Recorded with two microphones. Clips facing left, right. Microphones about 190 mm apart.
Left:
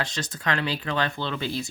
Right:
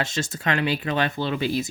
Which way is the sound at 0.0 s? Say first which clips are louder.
Right 3 dB; 25° right (ahead or behind).